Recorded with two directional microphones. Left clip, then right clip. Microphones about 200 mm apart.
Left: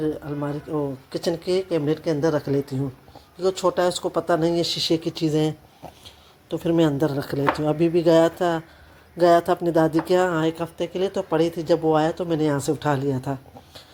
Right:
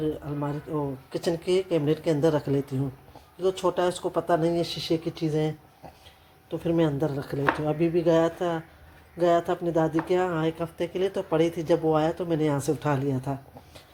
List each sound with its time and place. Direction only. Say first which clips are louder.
0.0 s speech: left 3 dB; 15° left (ahead or behind)